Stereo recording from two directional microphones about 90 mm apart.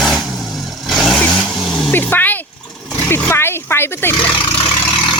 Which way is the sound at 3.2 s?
25° left (ahead or behind).